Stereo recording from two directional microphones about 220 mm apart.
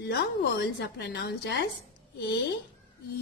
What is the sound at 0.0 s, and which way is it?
A woman's voice, 50° left (ahead or behind).